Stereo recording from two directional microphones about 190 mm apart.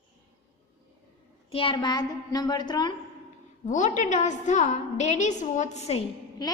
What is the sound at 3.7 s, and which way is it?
A woman's voice, 40° left (ahead or behind).